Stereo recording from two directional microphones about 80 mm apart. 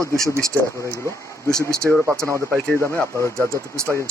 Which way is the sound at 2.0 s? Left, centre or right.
Centre.